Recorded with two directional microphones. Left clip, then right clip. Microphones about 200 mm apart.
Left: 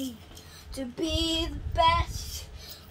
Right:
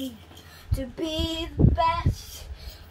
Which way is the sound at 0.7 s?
5° right (ahead or behind).